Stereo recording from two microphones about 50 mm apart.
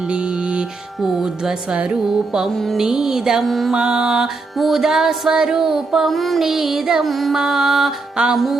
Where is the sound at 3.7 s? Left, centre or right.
Centre.